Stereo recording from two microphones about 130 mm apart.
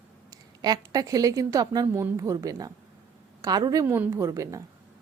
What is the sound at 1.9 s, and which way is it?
Speech, 15° right (ahead or behind).